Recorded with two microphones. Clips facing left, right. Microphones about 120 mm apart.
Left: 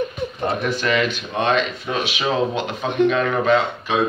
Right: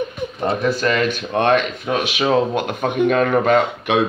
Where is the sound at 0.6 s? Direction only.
40° right (ahead or behind).